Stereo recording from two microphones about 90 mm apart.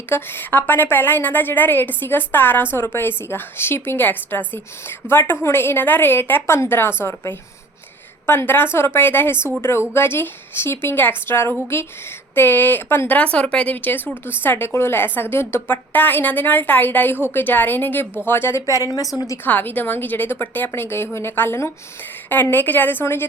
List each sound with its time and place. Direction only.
0.1 s a woman's voice: 25° left (ahead or behind)
8.3 s a woman's voice: 25° left (ahead or behind)
18.6 s a woman's voice: 40° left (ahead or behind)
19.5 s a woman's voice: 20° left (ahead or behind)